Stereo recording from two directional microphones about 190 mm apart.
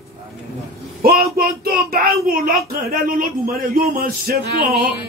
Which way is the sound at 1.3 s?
50° right (ahead or behind).